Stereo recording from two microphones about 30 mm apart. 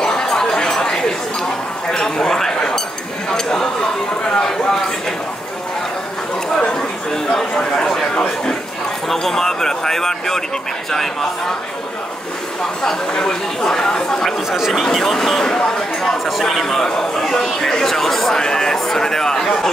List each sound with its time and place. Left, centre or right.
0.0 s a sound: centre
0.7 s chatter: left
1.9 s a sound: centre
9.1 s speech: centre
12.8 s speech: centre
17.0 s speech: centre
18.4 s speech: centre